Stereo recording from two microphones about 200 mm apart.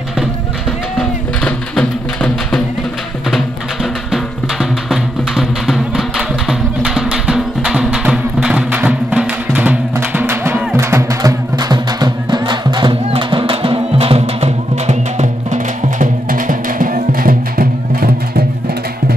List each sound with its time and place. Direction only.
0.9 s music: 5° left (ahead or behind)
4.1 s music: centre (ahead or behind); by 18.4 s 50° right (ahead or behind)